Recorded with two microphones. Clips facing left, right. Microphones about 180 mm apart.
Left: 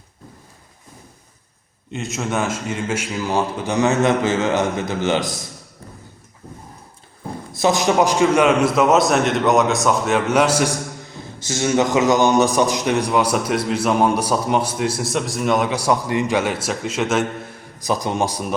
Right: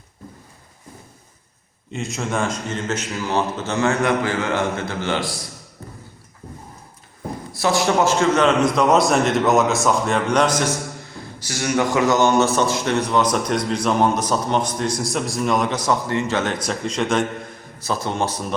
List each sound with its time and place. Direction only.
1.9 s a man's voice: centre (ahead or behind); by 5.4 s 20° left (ahead or behind)
7.5 s a man's voice: 20° left (ahead or behind)
11.4 s a man's voice: 25° left (ahead or behind); by 17.2 s 5° left (ahead or behind)
17.8 s a man's voice: 15° left (ahead or behind)